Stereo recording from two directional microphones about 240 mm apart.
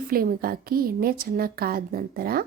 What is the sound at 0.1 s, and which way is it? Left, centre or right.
A woman's voice, right.